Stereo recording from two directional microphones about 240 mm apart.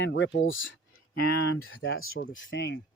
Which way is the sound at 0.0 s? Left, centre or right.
Left.